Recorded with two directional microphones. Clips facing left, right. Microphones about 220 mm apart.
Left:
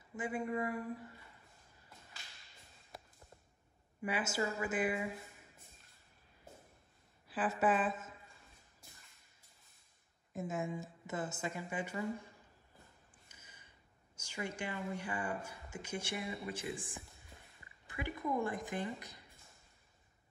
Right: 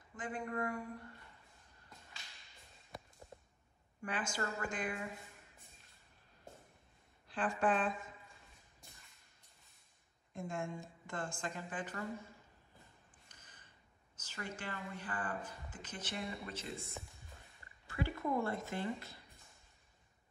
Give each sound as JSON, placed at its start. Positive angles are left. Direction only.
{"t": 0.1, "sound": "speech", "side_deg": 10}
{"t": 4.0, "sound": "a woman's voice", "side_deg": 5}
{"t": 7.2, "sound": "speech", "side_deg": 5}
{"t": 8.8, "sound": "a sound", "side_deg": 0}
{"t": 10.3, "sound": "a woman's voice", "side_deg": 5}
{"t": 13.3, "sound": "a sound", "side_deg": 10}
{"t": 14.1, "sound": "a woman's voice", "side_deg": 15}
{"t": 17.8, "sound": "a woman's voice", "side_deg": 15}